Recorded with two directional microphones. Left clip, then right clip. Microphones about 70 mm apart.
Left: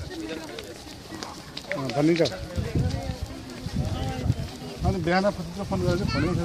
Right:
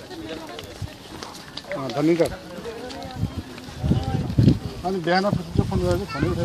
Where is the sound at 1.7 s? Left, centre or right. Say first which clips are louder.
Right 2 dB; centre.